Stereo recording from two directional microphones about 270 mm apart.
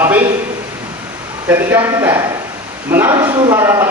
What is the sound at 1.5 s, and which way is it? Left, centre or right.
A man's voice, centre.